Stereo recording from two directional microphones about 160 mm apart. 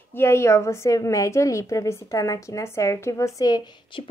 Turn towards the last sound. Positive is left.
turn(degrees=25)  # may be behind; listen again after turning